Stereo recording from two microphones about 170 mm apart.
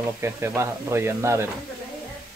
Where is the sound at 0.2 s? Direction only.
15° right (ahead or behind).